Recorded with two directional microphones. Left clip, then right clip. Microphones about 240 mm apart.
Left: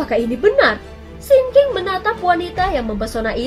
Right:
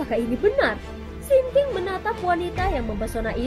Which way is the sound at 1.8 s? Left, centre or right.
Right.